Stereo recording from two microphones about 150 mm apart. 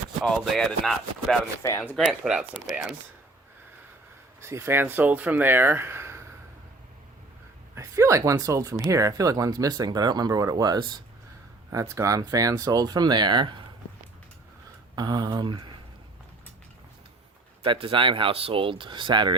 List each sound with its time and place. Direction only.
0.3 s rub: centre (ahead or behind)
4.4 s speech: 20° right (ahead or behind)
7.8 s speech: 20° right (ahead or behind)
14.9 s speech: 30° right (ahead or behind)
17.6 s speech: 35° right (ahead or behind)